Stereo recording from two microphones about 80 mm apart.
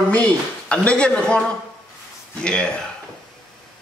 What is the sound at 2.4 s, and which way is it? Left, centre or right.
Speech, centre.